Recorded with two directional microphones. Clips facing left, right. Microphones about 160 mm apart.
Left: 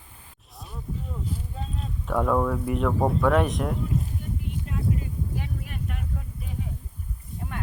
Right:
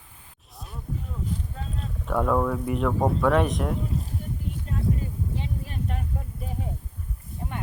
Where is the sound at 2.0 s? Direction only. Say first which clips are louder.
Even; centre (ahead or behind).